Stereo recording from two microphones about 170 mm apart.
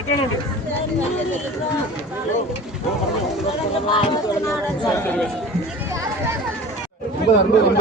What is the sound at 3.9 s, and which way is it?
Speech, 30° left (ahead or behind).